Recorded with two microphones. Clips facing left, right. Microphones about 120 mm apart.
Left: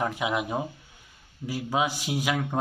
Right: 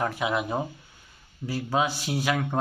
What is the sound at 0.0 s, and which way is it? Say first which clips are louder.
Speech: right 1 dB; 15° left (ahead or behind).